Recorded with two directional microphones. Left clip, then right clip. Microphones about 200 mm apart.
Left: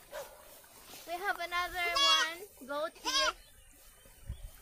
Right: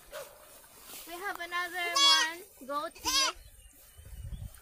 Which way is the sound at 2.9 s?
55° right (ahead or behind).